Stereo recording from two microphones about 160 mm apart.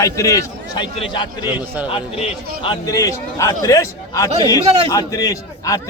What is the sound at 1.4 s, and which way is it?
Speech, 10° right (ahead or behind).